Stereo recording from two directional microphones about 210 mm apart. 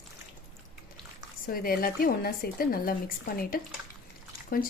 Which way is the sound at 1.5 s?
45° left (ahead or behind).